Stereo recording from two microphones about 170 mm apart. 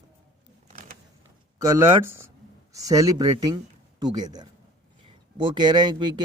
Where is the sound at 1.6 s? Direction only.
20° right (ahead or behind).